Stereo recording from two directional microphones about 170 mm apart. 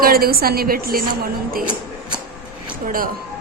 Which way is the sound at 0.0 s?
60° right (ahead or behind).